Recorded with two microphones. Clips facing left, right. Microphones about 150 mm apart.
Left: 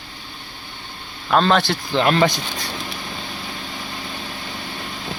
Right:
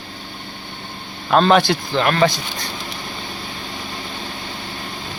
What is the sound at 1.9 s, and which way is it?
Speech, 15° left (ahead or behind).